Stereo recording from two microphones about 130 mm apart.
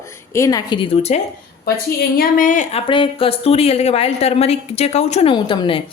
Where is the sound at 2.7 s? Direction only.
45° left (ahead or behind).